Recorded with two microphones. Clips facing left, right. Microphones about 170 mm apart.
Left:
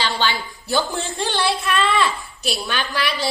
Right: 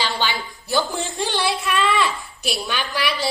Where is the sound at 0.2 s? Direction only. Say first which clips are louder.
Left 2 dB; 15° right (ahead or behind).